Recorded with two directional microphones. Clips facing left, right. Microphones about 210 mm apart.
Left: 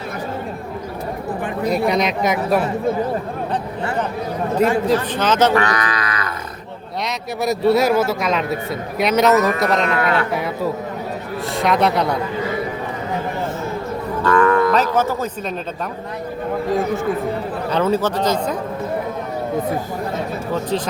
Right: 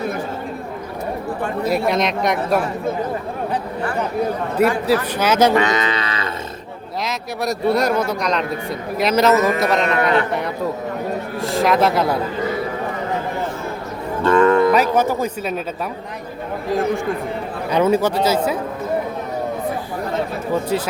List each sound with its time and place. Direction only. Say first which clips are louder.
1.6 s a man's voice: left 1 dB; centre (ahead or behind)
5.1 s livestock: right 2 dB; 10° right (ahead or behind); by 6.3 s 25° right (ahead or behind)
7.4 s a man's voice: left 3 dB; 5° left (ahead or behind)
11.5 s a man's voice: right 1 dB; centre (ahead or behind)
14.3 s cattle: right 2 dB; 25° right (ahead or behind)
14.9 s speech: right 1 dB; 15° right (ahead or behind)
17.7 s speech: right 2 dB; 10° right (ahead or behind)
20.5 s speech: right 1 dB; 10° right (ahead or behind)